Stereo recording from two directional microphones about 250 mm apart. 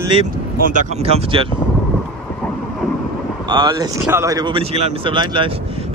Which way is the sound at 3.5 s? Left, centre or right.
Centre.